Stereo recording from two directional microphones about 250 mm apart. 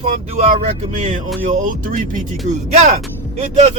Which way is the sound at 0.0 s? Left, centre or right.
Right.